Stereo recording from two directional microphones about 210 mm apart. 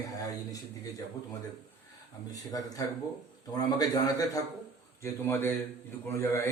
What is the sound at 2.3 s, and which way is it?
A man's voice, 15° left (ahead or behind).